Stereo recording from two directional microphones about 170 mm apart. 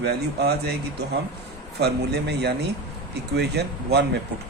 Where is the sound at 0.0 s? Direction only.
70° right (ahead or behind).